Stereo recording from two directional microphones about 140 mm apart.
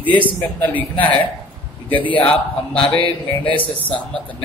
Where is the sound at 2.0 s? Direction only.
10° left (ahead or behind).